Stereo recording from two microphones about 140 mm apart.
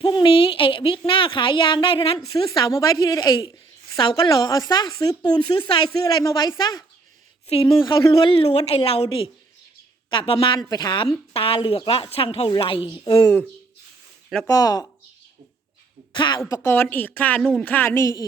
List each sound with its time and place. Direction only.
0.0 s a sound: 35° left (ahead or behind)
1.0 s a woman's voice: 40° left (ahead or behind)
2.5 s a woman's voice: 25° left (ahead or behind)
7.4 s a woman's voice: 40° left (ahead or behind)
13.1 s a woman's voice: 20° left (ahead or behind)
14.4 s speech: 25° left (ahead or behind)
16.1 s a woman's voice: 35° left (ahead or behind)
16.5 s a woman's voice: 15° left (ahead or behind)